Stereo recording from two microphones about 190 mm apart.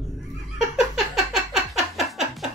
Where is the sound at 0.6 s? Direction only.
Centre (ahead or behind).